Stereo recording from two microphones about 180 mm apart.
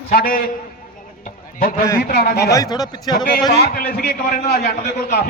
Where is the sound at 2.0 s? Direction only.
60° left (ahead or behind).